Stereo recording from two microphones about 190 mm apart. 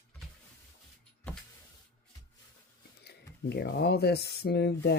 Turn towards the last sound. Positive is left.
turn(degrees=60)  # may be behind; listen again after turning